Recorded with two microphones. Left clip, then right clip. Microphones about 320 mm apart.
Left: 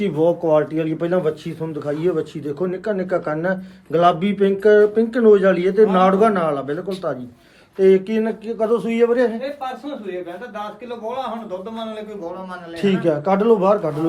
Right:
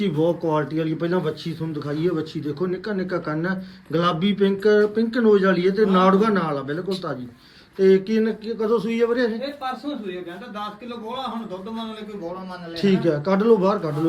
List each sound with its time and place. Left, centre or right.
0.0 s speech: centre
12.8 s speech: centre